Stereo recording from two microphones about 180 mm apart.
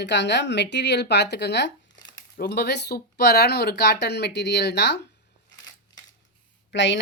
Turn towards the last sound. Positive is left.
turn(degrees=90)